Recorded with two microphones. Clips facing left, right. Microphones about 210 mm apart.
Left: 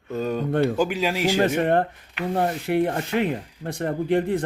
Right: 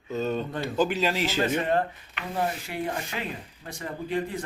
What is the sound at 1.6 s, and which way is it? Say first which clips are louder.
Speech: left 5 dB; 60° left (ahead or behind).